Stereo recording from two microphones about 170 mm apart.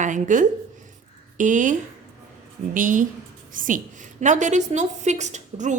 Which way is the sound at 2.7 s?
50° right (ahead or behind).